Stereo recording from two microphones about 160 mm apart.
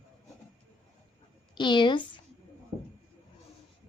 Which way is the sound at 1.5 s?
30° left (ahead or behind).